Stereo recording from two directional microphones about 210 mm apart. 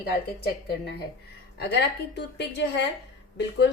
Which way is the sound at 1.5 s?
55° left (ahead or behind).